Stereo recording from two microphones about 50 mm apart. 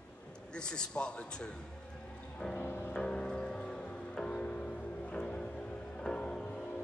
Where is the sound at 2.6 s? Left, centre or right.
Left.